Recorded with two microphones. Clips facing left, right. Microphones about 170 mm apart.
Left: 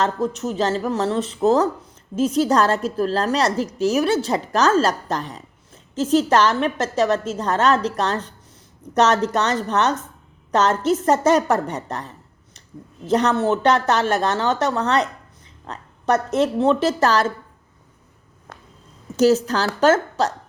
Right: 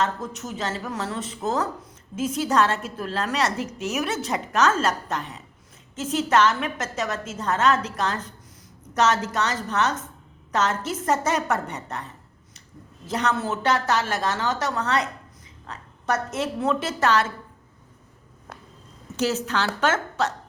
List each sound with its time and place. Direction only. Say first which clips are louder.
0.0 s a woman's voice: left 6 dB; 35° left (ahead or behind)
19.1 s a woman's voice: left 8 dB; 40° left (ahead or behind)